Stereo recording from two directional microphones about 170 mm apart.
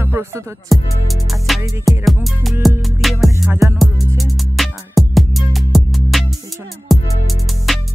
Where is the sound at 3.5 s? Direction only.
15° right (ahead or behind).